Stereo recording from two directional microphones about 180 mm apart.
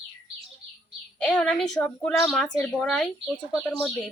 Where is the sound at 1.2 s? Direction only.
5° left (ahead or behind).